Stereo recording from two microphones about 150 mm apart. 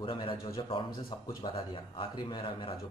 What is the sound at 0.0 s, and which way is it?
Speech, 35° left (ahead or behind).